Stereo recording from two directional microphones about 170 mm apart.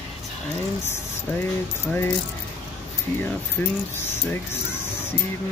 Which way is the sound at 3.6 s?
10° left (ahead or behind).